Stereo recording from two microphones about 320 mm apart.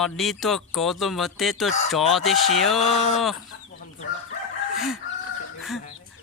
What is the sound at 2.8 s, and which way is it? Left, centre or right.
Speech, centre.